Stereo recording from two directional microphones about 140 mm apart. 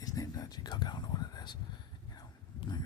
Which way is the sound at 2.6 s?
35° left (ahead or behind).